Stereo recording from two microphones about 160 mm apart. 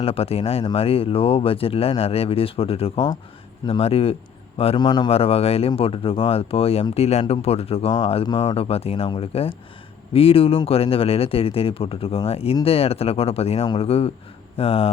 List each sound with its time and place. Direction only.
0.0 s a man's voice: 35° left (ahead or behind)